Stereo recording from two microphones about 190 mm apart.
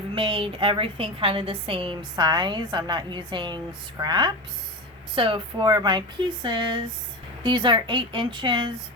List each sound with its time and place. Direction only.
0.1 s a woman's voice: 25° right (ahead or behind)